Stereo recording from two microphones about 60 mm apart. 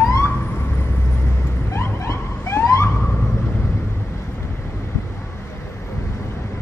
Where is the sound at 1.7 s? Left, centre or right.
Left.